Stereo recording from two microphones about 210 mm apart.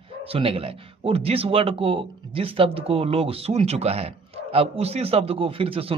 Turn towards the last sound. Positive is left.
turn(degrees=-25)  # may be behind; listen again after turning